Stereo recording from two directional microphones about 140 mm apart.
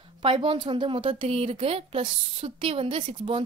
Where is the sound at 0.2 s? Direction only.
40° right (ahead or behind).